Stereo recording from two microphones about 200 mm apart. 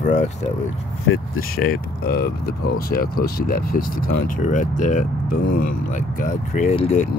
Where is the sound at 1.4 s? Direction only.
50° left (ahead or behind).